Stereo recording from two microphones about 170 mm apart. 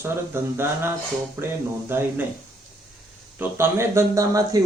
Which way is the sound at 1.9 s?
15° right (ahead or behind).